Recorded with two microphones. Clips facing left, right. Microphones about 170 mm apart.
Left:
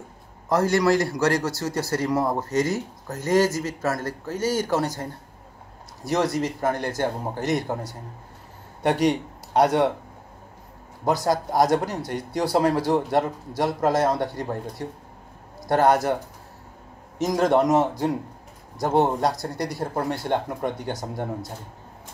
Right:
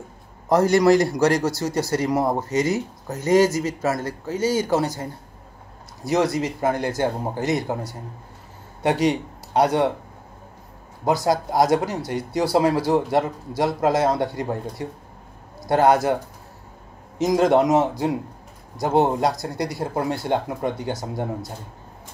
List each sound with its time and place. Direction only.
0.5 s a man's voice: 20° right (ahead or behind); by 9.9 s centre (ahead or behind)
11.1 s speech: 10° right (ahead or behind)
17.2 s speech: 10° right (ahead or behind)